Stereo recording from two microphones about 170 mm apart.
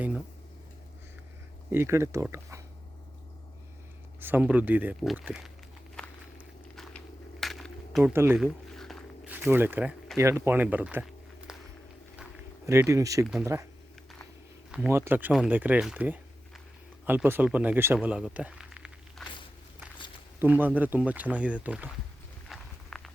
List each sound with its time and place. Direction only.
1.7 s speech: 15° right (ahead or behind)
4.2 s speech: 10° right (ahead or behind)
6.0 s walk: 5° left (ahead or behind)
6.7 s a sound: centre (ahead or behind)
8.1 s speech: 15° right (ahead or behind)
8.4 s a sound: centre (ahead or behind)
9.5 s speech: 10° right (ahead or behind)
11.5 s walk: 5° right (ahead or behind)
12.6 s speech: 15° right (ahead or behind)
14.7 s speech: 10° right (ahead or behind)
20.4 s speech: 10° right (ahead or behind)
22.4 s walk: centre (ahead or behind)